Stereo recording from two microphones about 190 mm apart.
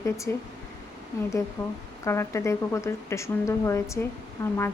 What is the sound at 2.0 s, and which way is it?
A woman's voice, 15° left (ahead or behind).